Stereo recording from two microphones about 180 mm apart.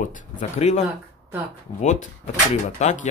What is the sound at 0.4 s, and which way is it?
Speech, 40° left (ahead or behind).